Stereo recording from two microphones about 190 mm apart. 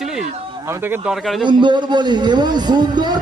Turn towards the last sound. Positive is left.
turn(degrees=-20)  # may be behind; listen again after turning